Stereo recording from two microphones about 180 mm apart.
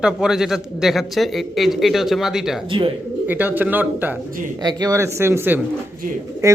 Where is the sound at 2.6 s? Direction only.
30° right (ahead or behind).